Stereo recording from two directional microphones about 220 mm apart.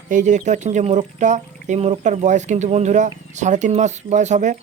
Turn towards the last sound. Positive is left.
turn(degrees=-30)  # may be behind; listen again after turning